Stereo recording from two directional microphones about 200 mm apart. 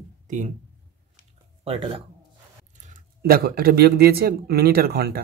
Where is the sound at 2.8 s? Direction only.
45° right (ahead or behind).